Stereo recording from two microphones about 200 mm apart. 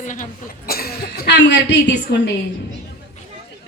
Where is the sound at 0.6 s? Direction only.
50° left (ahead or behind).